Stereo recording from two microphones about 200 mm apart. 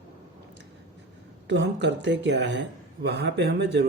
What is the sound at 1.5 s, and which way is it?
Speech, 60° right (ahead or behind).